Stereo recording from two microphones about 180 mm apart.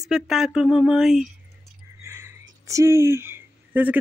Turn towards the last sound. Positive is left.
turn(degrees=-10)  # may be behind; listen again after turning